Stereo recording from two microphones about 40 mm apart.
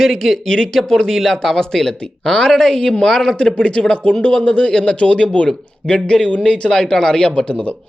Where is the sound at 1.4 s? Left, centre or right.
Centre.